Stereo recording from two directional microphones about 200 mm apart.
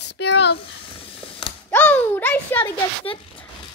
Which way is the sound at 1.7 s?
10° left (ahead or behind).